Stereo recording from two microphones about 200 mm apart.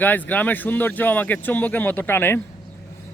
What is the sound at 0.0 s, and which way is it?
Speech, 10° left (ahead or behind).